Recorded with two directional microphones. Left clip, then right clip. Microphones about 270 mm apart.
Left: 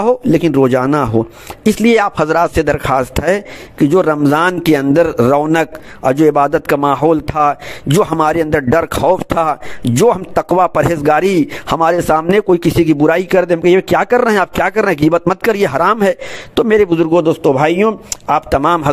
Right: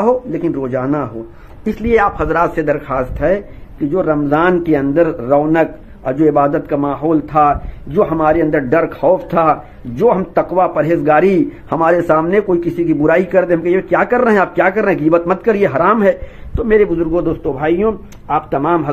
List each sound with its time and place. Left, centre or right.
0.0 s a man's voice: left